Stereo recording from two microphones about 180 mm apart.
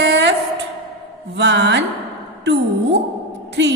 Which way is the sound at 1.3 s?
75° right (ahead or behind).